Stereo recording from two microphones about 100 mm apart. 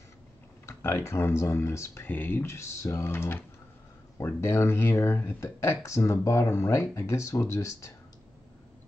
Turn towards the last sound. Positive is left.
turn(degrees=30)  # may be behind; listen again after turning